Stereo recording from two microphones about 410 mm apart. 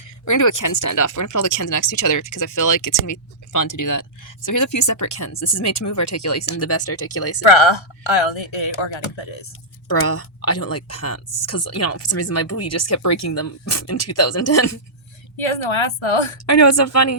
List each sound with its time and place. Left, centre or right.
0.3 s speech: left
7.4 s speech: left
10.1 s speech: left
16.5 s speech: left